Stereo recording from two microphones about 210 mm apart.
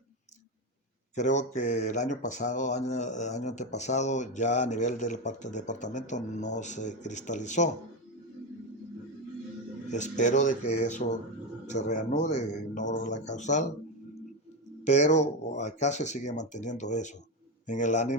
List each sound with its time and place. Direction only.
1.1 s speech: 35° left (ahead or behind)
9.9 s speech: 35° left (ahead or behind)
14.8 s speech: 35° left (ahead or behind)